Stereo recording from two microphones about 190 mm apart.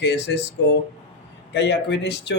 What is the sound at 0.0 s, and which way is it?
Speech, 65° left (ahead or behind).